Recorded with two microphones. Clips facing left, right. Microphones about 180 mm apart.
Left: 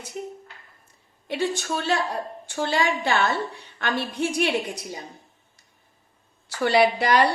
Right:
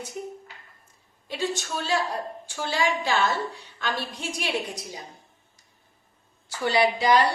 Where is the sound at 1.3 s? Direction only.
60° left (ahead or behind).